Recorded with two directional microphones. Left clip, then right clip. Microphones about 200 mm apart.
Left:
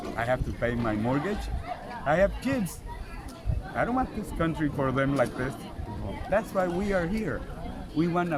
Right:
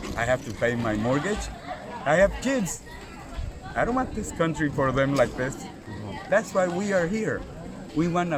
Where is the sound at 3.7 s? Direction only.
15° right (ahead or behind).